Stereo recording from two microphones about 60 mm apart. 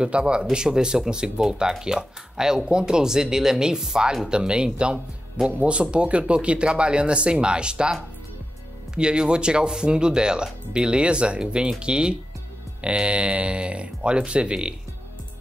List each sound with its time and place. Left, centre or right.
0.0 s speech: centre